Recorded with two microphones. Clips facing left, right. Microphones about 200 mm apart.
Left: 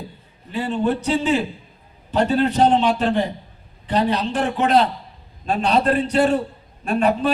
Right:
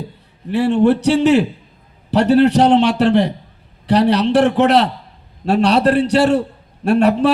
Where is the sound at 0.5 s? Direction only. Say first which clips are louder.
Right 8 dB; 75° right (ahead or behind).